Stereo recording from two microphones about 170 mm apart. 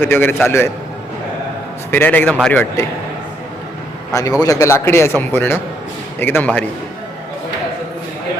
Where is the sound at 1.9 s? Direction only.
10° left (ahead or behind).